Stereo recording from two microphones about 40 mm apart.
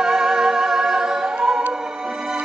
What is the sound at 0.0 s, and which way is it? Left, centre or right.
Music, centre.